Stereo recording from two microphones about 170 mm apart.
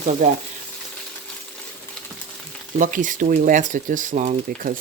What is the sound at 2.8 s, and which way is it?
Speech, 50° right (ahead or behind).